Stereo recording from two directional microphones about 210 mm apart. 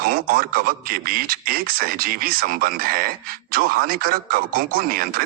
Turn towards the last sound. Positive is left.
turn(degrees=-45)  # may be behind; listen again after turning